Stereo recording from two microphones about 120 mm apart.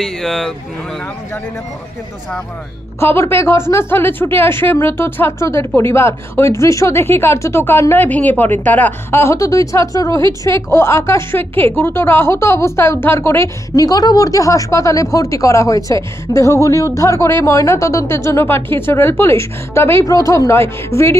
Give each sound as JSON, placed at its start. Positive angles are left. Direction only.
{"t": 0.0, "sound": "speech", "side_deg": 0}
{"t": 3.0, "sound": "speech", "side_deg": 20}